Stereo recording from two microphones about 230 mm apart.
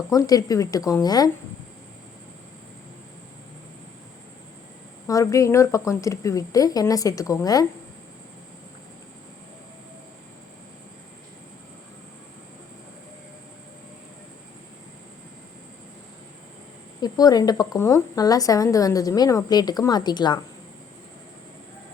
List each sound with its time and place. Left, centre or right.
0.1 s a woman's voice: centre
5.0 s a woman's voice: centre
17.0 s a woman's voice: centre